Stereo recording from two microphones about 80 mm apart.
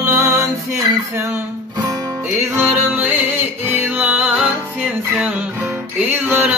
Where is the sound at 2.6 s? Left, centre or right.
Right.